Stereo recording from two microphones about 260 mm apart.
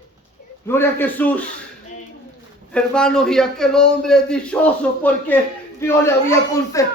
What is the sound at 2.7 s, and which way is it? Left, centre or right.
A man's voice, centre.